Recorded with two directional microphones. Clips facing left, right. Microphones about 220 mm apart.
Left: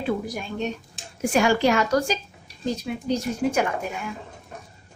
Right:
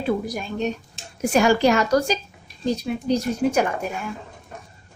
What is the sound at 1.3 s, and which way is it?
Speech, 40° right (ahead or behind).